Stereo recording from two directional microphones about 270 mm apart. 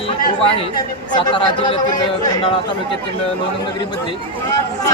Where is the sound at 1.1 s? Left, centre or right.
Centre.